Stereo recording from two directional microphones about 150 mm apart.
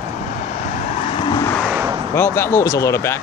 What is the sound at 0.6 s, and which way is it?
Vehicle, 50° left (ahead or behind).